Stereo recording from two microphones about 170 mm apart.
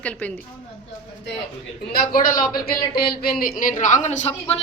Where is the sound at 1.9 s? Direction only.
60° left (ahead or behind).